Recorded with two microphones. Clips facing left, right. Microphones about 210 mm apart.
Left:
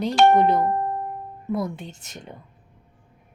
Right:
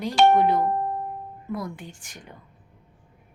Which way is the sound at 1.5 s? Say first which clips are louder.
Left 5 dB; 25° left (ahead or behind).